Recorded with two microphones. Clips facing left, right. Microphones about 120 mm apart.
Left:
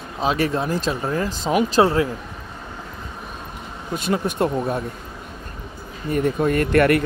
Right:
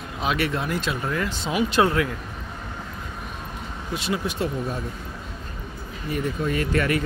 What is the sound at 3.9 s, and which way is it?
Speech, 50° left (ahead or behind).